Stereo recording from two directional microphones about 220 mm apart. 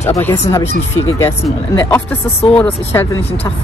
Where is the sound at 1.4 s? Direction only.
10° left (ahead or behind).